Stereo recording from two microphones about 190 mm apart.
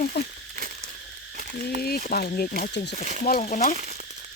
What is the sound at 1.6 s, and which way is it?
Speech, 55° left (ahead or behind).